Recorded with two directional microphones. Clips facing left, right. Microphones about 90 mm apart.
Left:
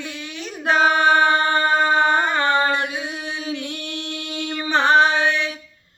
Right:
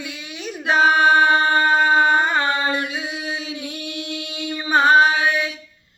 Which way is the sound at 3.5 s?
15° right (ahead or behind).